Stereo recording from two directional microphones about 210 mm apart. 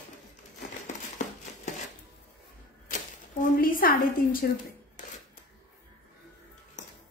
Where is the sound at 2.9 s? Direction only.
40° left (ahead or behind).